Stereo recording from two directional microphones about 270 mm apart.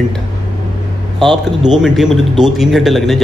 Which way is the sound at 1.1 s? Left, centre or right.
Centre.